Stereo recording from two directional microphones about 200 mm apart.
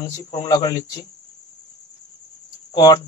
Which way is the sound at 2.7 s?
20° left (ahead or behind).